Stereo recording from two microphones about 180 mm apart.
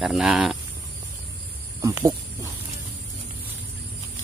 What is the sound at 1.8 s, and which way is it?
Speech, 15° right (ahead or behind).